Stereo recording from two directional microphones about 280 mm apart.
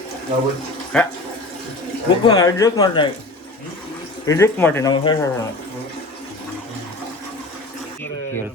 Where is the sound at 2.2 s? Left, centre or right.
Centre.